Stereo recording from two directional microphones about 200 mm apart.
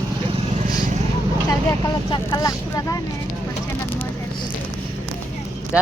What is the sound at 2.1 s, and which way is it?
Vehicle, 20° left (ahead or behind).